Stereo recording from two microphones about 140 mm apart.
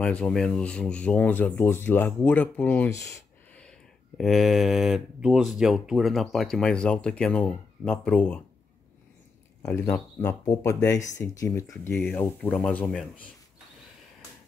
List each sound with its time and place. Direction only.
0.0 s speech: 5° left (ahead or behind)
2.9 s speech: 20° left (ahead or behind)
4.2 s speech: centre (ahead or behind)
9.6 s speech: 20° left (ahead or behind)